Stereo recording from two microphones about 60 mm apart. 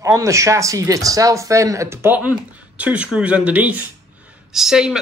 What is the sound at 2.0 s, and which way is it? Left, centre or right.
Speech, right.